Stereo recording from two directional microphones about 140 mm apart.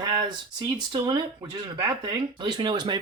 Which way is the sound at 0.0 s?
30° right (ahead or behind).